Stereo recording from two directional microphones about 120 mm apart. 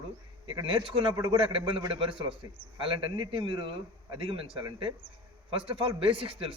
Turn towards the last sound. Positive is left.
turn(degrees=-50)  # may be behind; listen again after turning